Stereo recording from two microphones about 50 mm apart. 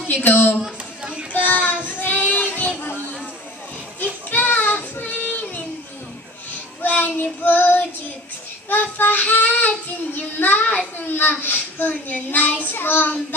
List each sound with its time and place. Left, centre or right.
0.1 s child singing: left
4.3 s child singing: left
6.8 s child singing: left